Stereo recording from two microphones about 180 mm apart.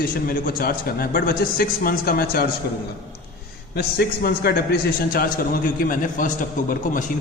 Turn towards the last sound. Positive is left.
turn(degrees=50)  # may be behind; listen again after turning